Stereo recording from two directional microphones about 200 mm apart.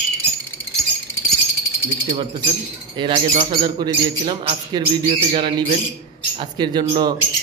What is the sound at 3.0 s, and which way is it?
Speech, 25° right (ahead or behind).